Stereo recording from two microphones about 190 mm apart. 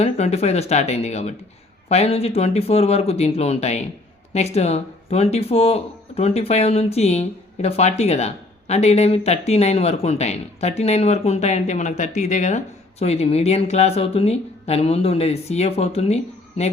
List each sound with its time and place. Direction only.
0.0 s speech: 35° left (ahead or behind)